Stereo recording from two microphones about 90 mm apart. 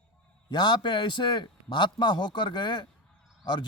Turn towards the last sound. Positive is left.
turn(degrees=55)  # may be behind; listen again after turning